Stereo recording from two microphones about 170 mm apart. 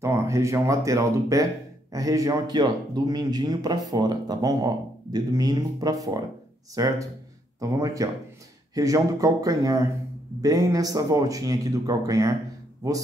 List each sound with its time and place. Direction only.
0.0 s speech: 15° right (ahead or behind)